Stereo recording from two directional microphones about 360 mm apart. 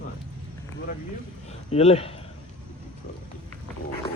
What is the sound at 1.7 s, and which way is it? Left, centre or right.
Speech, centre.